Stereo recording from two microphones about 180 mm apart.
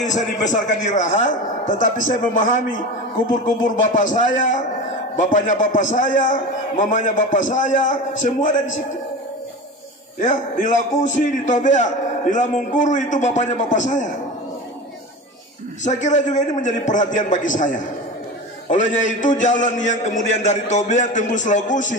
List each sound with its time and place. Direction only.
0.0 s a man's voice: 40° left (ahead or behind)
10.2 s a man's voice: 45° left (ahead or behind)
15.8 s a man's voice: 40° left (ahead or behind)